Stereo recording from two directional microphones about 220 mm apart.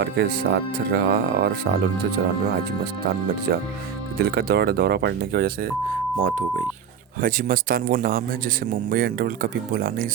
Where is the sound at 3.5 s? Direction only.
45° right (ahead or behind).